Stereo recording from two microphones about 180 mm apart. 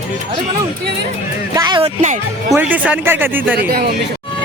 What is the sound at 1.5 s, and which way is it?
Speech, 25° right (ahead or behind).